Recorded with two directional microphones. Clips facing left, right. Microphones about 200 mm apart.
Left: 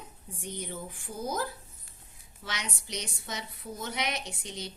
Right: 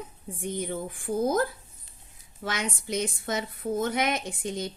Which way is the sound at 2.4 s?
50° right (ahead or behind).